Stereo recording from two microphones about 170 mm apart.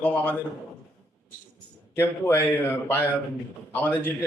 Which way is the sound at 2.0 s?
15° left (ahead or behind).